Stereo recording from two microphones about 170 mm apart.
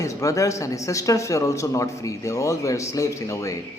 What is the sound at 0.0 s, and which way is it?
A man's voice, 20° left (ahead or behind).